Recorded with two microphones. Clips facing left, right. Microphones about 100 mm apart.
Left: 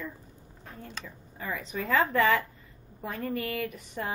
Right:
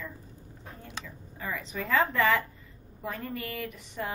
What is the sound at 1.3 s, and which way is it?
Speech, 40° left (ahead or behind).